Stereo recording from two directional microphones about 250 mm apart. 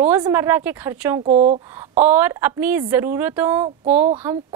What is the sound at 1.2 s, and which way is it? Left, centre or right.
Speech, right.